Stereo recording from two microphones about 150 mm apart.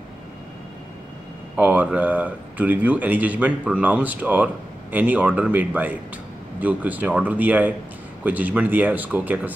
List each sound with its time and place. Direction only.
1.6 s speech: 10° right (ahead or behind)